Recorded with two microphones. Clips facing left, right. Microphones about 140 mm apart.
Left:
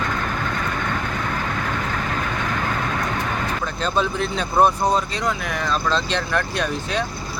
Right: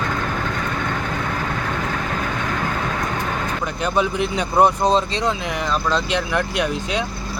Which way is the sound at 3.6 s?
15° right (ahead or behind).